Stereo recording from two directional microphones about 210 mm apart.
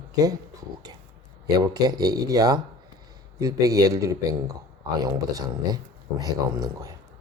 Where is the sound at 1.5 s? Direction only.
20° right (ahead or behind).